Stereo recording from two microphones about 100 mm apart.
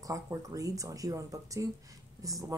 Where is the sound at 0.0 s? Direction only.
35° right (ahead or behind).